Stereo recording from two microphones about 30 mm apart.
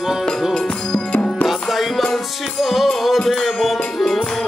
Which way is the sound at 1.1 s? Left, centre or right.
Left.